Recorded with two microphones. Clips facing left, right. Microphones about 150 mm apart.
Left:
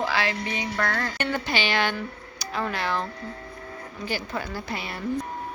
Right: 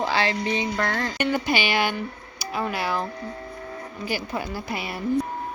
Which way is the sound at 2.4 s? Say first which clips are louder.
Right 2 dB; 10° right (ahead or behind).